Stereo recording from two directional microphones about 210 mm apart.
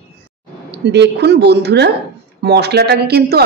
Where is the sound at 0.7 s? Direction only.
55° right (ahead or behind).